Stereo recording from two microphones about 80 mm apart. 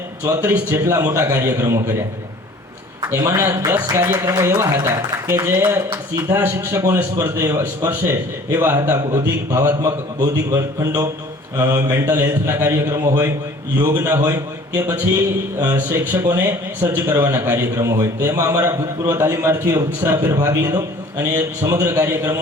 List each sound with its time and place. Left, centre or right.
0.3 s speech: right
3.1 s speech: right
11.5 s a man's voice: right
15.9 s speech: right
20.0 s a man's voice: right